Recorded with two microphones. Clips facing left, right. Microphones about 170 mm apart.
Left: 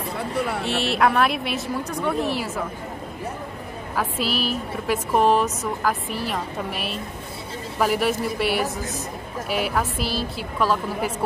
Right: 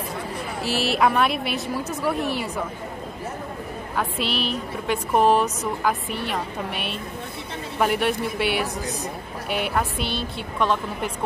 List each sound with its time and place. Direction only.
0.7 s a woman's voice: centre (ahead or behind)
3.9 s a woman's voice: centre (ahead or behind)